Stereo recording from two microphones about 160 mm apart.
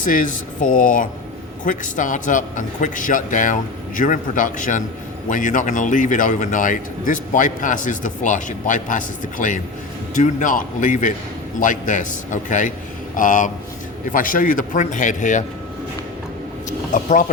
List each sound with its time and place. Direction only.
0.0 s a man's voice: 55° left (ahead or behind)
16.9 s a man's voice: 55° left (ahead or behind)